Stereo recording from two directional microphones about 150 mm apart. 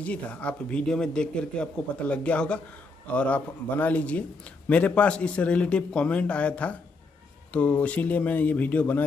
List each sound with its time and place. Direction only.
0.0 s speech: 10° left (ahead or behind)